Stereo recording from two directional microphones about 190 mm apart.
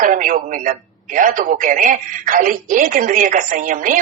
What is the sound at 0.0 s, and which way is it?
Speech, 45° right (ahead or behind).